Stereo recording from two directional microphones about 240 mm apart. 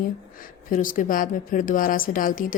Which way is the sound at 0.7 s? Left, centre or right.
Left.